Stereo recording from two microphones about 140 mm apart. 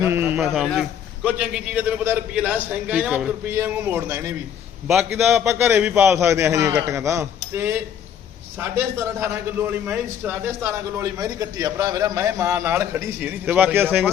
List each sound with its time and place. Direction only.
0.0 s a sound: 15° right (ahead or behind)
0.4 s a man's voice: centre (ahead or behind); by 4.2 s 15° right (ahead or behind)
5.3 s a man's voice: 20° right (ahead or behind)